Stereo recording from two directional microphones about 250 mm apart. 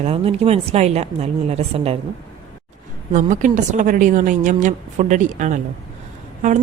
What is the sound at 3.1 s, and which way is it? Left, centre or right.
A woman's voice, right.